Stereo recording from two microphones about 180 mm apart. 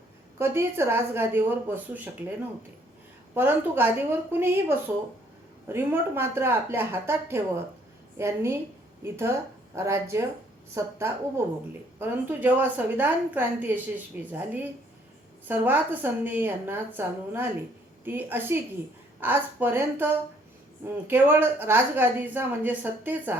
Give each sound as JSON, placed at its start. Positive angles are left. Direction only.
{"t": 0.3, "sound": "a woman's voice", "side_deg": -15}
{"t": 3.3, "sound": "a woman's voice", "side_deg": -10}